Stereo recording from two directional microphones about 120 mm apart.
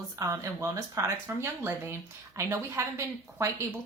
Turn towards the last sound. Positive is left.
turn(degrees=-25)  # may be behind; listen again after turning